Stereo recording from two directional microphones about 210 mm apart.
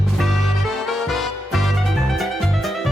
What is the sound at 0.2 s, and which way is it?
Music, centre (ahead or behind).